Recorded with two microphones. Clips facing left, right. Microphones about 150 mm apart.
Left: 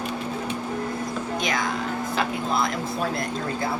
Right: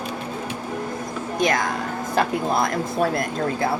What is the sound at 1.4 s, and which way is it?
Speech, 50° right (ahead or behind).